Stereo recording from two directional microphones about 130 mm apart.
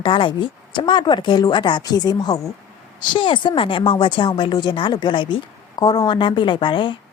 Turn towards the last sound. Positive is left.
turn(degrees=40)  # may be behind; listen again after turning